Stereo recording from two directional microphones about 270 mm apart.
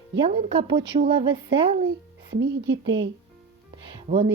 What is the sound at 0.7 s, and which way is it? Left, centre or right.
Speech, right.